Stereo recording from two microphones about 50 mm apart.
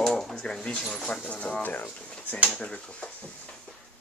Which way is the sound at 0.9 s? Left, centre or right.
Centre.